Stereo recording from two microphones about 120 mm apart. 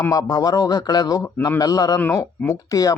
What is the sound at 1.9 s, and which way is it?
A man's voice, 20° left (ahead or behind).